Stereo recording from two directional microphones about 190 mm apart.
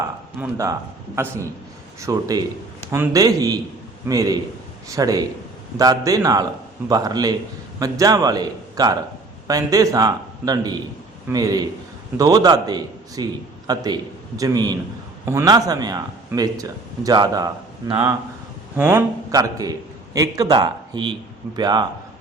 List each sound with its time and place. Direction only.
0.4 s a man's voice: 10° right (ahead or behind)
18.8 s speech: 10° right (ahead or behind)